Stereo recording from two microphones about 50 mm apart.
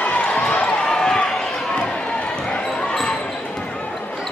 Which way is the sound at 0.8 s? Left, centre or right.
Centre.